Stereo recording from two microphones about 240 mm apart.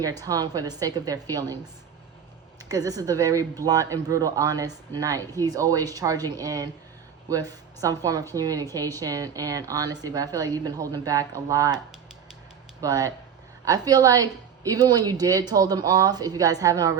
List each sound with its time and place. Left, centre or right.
0.0 s a woman's voice: centre
2.6 s a woman's voice: centre
7.8 s a woman's voice: centre
12.8 s a woman's voice: centre